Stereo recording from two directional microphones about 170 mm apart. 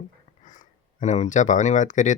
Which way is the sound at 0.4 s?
50° left (ahead or behind).